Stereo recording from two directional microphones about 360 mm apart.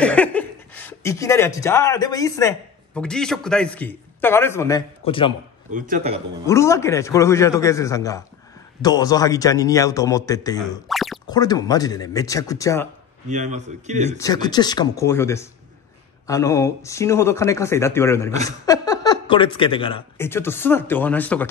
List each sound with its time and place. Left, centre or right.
0.0 s speech: centre
5.7 s a man's voice: right
6.4 s speech: centre
10.9 s boing: centre
11.2 s speech: centre
13.3 s a man's voice: centre
14.1 s speech: centre